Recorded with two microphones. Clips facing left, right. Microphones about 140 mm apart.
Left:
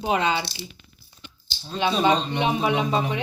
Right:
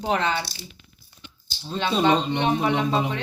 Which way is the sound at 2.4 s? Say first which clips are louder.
Right 1 dB; 10° left (ahead or behind).